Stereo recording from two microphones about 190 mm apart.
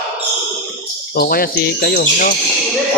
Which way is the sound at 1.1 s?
55° left (ahead or behind).